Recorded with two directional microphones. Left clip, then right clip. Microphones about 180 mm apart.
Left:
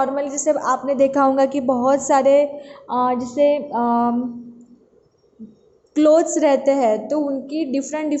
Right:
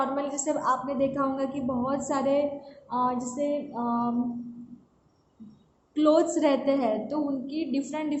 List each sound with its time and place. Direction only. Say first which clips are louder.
0.0 s a woman's voice: left 8 dB; 35° left (ahead or behind)
2.9 s a sound: left 8 dB; 40° left (ahead or behind)
5.9 s a woman's voice: left 8 dB; 35° left (ahead or behind)